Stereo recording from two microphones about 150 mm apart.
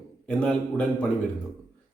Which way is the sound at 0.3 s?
5° left (ahead or behind).